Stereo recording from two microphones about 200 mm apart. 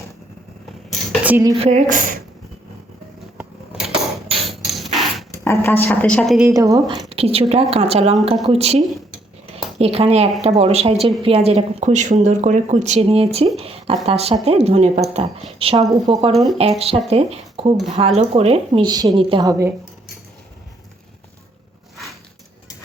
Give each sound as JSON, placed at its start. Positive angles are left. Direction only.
{"t": 1.2, "sound": "speech", "side_deg": -10}
{"t": 1.5, "sound": "speech", "side_deg": -35}
{"t": 3.3, "sound": "a sound", "side_deg": -5}
{"t": 5.5, "sound": "a woman's voice", "side_deg": 10}
{"t": 6.5, "sound": "speech", "side_deg": -15}
{"t": 7.1, "sound": "a woman's voice", "side_deg": -30}
{"t": 16.3, "sound": "speech", "side_deg": 0}
{"t": 16.6, "sound": "a woman's voice", "side_deg": -30}